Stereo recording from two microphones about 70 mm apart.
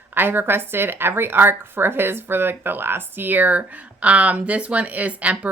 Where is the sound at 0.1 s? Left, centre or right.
Right.